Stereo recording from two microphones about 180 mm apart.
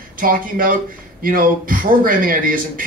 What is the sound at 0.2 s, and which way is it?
A man's voice, 50° right (ahead or behind).